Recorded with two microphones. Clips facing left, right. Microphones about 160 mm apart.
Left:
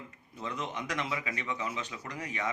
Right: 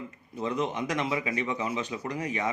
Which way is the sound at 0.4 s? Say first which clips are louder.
Right 7 dB; 15° right (ahead or behind).